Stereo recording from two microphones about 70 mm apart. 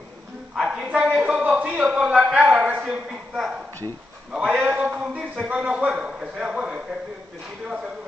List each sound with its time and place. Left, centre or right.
0.6 s a man's voice: centre
0.8 s a man's voice: right
3.1 s a man's voice: centre
4.6 s a man's voice: centre